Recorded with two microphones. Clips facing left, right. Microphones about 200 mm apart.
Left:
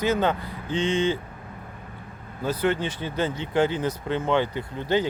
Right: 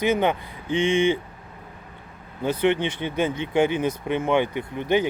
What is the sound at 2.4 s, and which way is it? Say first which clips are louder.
Speech: right 3 dB; 20° right (ahead or behind).